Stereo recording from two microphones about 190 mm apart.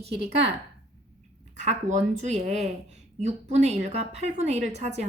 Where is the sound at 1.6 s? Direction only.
40° right (ahead or behind).